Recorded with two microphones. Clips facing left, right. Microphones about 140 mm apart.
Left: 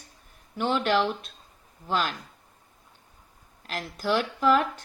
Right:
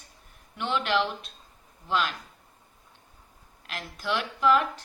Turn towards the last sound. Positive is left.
turn(degrees=45)  # may be behind; listen again after turning